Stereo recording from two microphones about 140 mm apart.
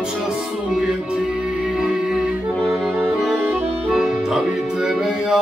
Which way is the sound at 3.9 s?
5° right (ahead or behind).